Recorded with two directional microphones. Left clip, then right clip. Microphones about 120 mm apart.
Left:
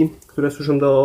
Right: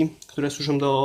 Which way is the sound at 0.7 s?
25° right (ahead or behind).